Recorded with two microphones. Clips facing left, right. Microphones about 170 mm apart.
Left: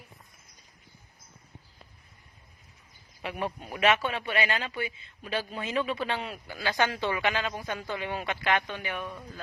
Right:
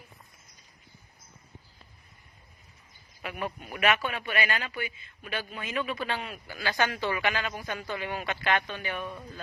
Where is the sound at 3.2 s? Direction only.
30° left (ahead or behind).